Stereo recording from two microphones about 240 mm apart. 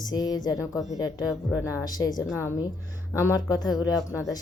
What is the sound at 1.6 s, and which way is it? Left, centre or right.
A woman's voice, centre.